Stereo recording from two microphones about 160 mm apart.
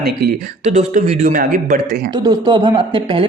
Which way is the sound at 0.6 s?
50° right (ahead or behind).